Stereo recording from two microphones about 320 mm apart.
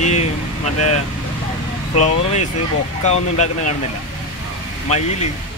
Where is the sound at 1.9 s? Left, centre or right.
Left.